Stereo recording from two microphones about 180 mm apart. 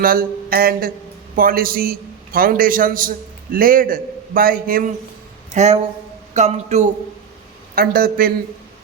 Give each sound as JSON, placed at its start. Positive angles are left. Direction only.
{"t": 0.0, "sound": "a man's voice", "side_deg": -55}
{"t": 5.5, "sound": "a man's voice", "side_deg": -40}
{"t": 7.8, "sound": "speech", "side_deg": -55}